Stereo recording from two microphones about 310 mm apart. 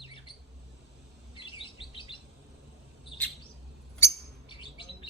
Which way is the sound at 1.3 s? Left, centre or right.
Centre.